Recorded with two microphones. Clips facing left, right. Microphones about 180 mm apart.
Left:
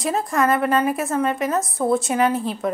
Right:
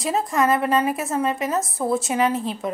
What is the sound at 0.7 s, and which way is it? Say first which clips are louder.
A woman's voice: left 1 dB; centre (ahead or behind).